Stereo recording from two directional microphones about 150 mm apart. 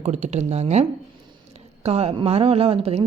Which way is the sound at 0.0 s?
50° right (ahead or behind).